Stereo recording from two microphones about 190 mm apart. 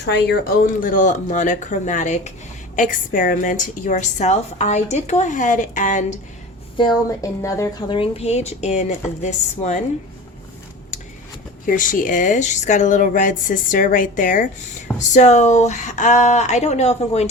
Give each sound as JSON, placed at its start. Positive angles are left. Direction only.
{"t": 0.0, "sound": "speech", "side_deg": 60}
{"t": 6.7, "sound": "speech", "side_deg": 20}
{"t": 11.6, "sound": "speech", "side_deg": 45}